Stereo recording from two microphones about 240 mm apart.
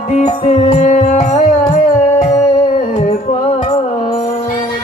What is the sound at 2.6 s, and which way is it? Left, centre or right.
Music, left.